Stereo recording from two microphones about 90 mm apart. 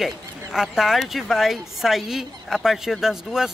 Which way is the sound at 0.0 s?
5° right (ahead or behind).